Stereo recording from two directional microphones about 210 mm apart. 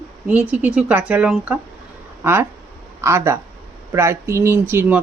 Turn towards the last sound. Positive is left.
turn(degrees=-10)  # may be behind; listen again after turning